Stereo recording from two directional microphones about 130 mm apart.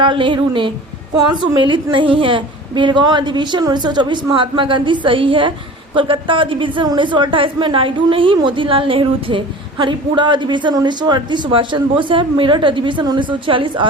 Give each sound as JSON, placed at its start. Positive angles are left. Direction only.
{"t": 0.0, "sound": "a woman's voice", "side_deg": -40}